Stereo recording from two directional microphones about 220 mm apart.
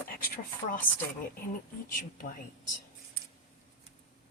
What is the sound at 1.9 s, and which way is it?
Speech, 40° left (ahead or behind).